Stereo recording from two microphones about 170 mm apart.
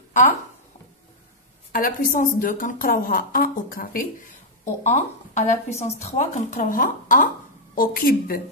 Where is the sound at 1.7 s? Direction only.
55° left (ahead or behind).